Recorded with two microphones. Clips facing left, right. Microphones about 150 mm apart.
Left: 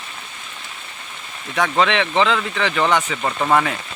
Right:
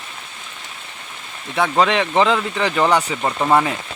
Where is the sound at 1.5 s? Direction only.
30° right (ahead or behind).